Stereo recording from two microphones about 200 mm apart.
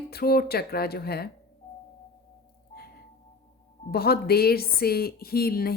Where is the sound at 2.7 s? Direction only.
50° left (ahead or behind).